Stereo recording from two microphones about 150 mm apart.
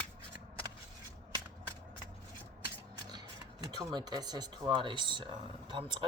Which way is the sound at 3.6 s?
30° right (ahead or behind).